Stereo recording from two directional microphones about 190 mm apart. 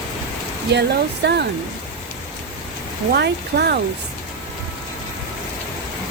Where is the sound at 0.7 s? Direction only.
60° right (ahead or behind).